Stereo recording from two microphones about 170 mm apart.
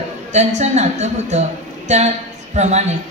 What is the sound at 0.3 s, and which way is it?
Speech, 40° right (ahead or behind).